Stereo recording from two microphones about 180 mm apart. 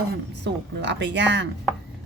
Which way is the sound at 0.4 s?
70° right (ahead or behind).